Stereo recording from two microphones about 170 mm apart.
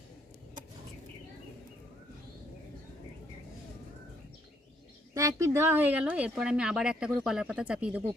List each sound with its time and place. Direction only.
5.1 s speech: 15° right (ahead or behind)